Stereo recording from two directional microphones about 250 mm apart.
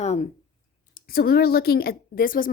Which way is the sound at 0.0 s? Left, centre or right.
Left.